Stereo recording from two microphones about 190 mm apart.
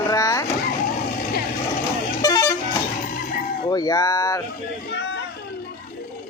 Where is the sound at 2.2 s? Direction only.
20° left (ahead or behind).